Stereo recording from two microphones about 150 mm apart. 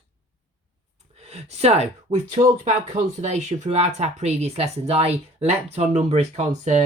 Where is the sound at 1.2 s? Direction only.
45° right (ahead or behind).